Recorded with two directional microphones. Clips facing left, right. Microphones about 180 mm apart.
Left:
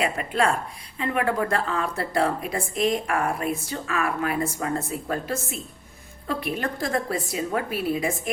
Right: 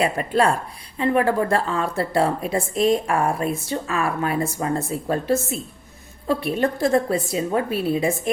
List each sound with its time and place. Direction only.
0.0 s speech: 35° right (ahead or behind)